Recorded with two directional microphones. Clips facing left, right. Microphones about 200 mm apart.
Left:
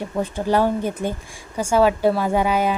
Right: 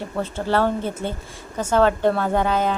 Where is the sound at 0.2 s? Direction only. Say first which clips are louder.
Left 2 dB; 15° left (ahead or behind).